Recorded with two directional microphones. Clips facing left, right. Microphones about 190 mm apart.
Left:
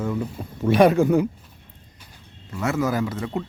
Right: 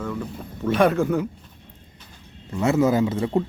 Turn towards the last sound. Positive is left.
turn(degrees=-25)  # may be behind; listen again after turning